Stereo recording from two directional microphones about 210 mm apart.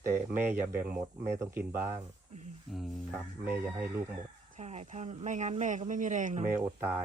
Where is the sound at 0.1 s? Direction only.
10° right (ahead or behind).